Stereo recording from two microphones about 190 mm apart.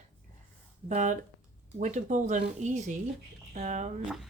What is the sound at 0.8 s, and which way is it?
Speech, 40° right (ahead or behind).